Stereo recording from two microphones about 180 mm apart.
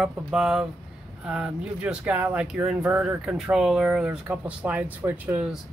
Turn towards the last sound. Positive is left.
turn(degrees=-10)  # may be behind; listen again after turning